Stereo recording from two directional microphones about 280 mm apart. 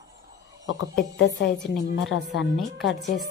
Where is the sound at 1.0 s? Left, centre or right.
Left.